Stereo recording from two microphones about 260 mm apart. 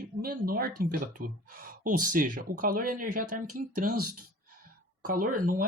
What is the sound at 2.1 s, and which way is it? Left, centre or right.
Speech, right.